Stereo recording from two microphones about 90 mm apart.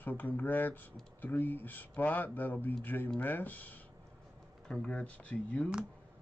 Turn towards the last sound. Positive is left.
turn(degrees=15)  # may be behind; listen again after turning